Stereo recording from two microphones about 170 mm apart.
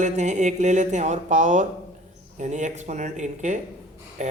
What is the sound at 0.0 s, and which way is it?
A man's voice, 45° right (ahead or behind).